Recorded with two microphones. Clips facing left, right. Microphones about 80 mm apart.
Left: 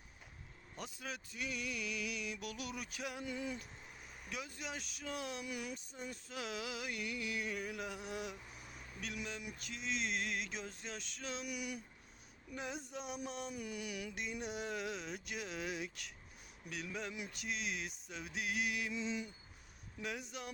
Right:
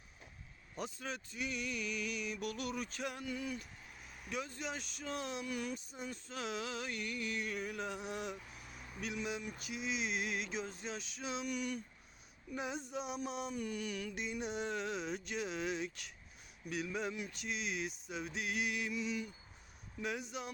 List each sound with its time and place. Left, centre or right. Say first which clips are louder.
0.9 s music: right 3 dB; centre
3.2 s a sound: right 1 dB; left
4.2 s music: right 4 dB; centre
5.7 s music: right 2 dB; centre
8.8 s speech: right 4 dB; centre
9.6 s music: right 2 dB; centre
11.4 s a sound: right 4 dB; centre
12.5 s music: right 4 dB; centre
13.5 s a sound: right 4 dB; centre
14.2 s music: right 3 dB; centre
18.9 s a sound: right 1 dB; left
20.0 s music: right 3 dB; centre